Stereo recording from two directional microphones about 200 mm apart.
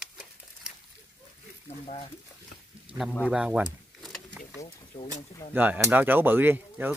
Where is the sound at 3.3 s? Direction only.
5° right (ahead or behind).